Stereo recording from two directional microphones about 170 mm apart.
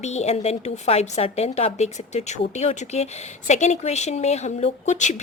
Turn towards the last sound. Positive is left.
turn(degrees=45)  # may be behind; listen again after turning